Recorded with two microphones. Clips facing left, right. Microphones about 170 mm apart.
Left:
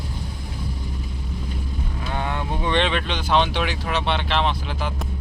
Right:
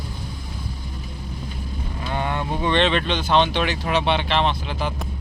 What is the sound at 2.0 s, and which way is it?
Vehicle, centre (ahead or behind).